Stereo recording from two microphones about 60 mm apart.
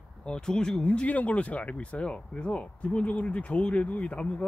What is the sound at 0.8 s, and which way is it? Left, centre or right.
Speech, left.